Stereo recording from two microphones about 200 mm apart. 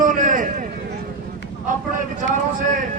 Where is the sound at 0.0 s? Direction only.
40° right (ahead or behind).